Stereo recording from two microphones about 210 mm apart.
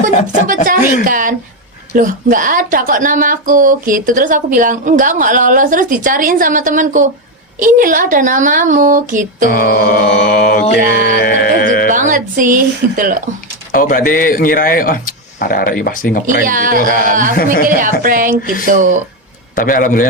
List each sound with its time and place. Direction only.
0.4 s a woman's voice: 40° right (ahead or behind)
9.5 s mantra: 45° left (ahead or behind)
11.9 s a woman's voice: 40° right (ahead or behind)
13.7 s a man's voice: 40° left (ahead or behind)
16.2 s a woman's voice: 40° right (ahead or behind)
17.3 s mantra: 45° left (ahead or behind)
17.7 s a woman's voice: 40° right (ahead or behind)
19.5 s a man's voice: 40° left (ahead or behind)